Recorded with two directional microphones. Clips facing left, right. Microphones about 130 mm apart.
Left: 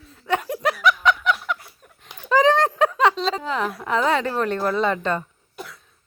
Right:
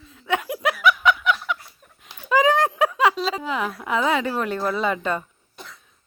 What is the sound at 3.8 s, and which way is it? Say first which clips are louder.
A woman's voice: left 1 dB; 5° right (ahead or behind).